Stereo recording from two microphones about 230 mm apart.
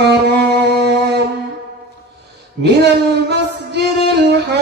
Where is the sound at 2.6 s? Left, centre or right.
Right.